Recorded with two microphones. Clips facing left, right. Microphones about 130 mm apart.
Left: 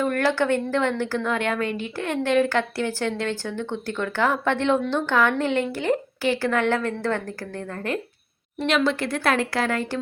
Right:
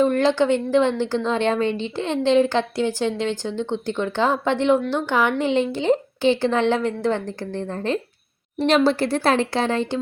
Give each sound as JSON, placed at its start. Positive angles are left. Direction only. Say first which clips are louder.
{"t": 0.0, "sound": "a woman's voice", "louder": "right 4 dB", "side_deg": -20}